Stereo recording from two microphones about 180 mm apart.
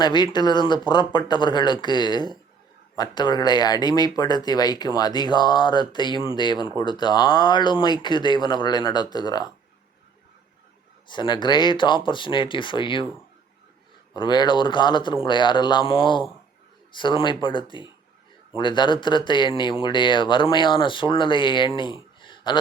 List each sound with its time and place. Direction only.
0.0 s speech: 25° left (ahead or behind)
11.1 s speech: 25° left (ahead or behind)
14.1 s speech: 25° left (ahead or behind)
21.8 s a sound: 25° left (ahead or behind)